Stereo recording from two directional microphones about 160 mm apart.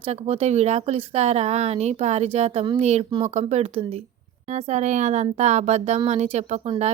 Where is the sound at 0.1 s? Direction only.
40° right (ahead or behind).